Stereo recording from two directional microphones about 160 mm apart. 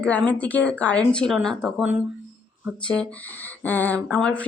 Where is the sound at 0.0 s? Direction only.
5° left (ahead or behind).